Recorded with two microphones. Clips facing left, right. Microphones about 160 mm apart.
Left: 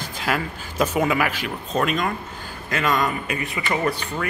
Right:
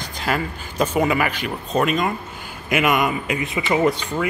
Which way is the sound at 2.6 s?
15° right (ahead or behind).